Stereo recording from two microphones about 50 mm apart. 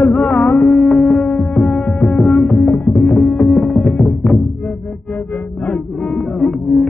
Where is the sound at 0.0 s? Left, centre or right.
Left.